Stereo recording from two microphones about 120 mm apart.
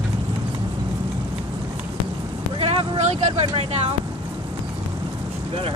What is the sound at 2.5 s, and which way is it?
Speech, 55° right (ahead or behind).